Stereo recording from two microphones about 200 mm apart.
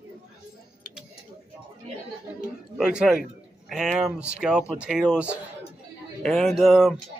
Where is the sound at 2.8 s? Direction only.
5° right (ahead or behind).